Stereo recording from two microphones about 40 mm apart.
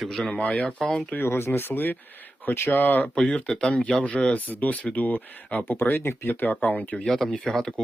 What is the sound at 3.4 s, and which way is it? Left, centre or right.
Speech, centre.